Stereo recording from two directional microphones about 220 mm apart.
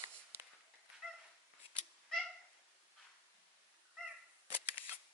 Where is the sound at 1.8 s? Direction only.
Centre (ahead or behind).